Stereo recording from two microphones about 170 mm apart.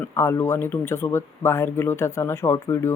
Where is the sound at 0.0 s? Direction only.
15° left (ahead or behind).